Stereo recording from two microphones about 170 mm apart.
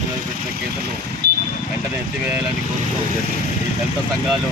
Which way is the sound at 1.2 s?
70° right (ahead or behind).